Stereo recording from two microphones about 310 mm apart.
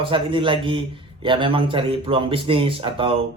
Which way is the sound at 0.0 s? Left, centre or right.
Centre.